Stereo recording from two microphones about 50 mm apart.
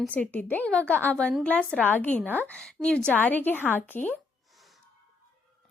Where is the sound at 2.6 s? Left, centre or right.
Left.